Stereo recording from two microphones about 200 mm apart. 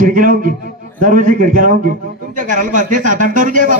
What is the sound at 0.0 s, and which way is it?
A man's voice, 40° right (ahead or behind).